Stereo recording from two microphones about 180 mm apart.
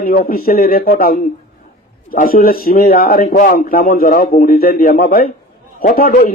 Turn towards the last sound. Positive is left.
turn(degrees=60)  # may be behind; listen again after turning